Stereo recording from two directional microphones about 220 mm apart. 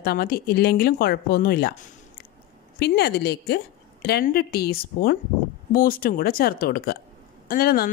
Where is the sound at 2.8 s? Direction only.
45° left (ahead or behind).